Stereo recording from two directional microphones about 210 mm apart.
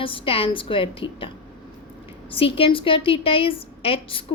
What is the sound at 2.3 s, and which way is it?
A woman's voice, 25° left (ahead or behind).